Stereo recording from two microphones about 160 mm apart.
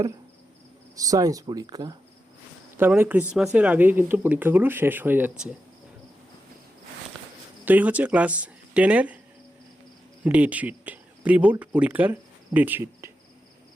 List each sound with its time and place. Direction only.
0.9 s speech: 20° right (ahead or behind)
2.7 s speech: 15° right (ahead or behind)
7.6 s speech: 10° right (ahead or behind)
10.2 s speech: 10° right (ahead or behind)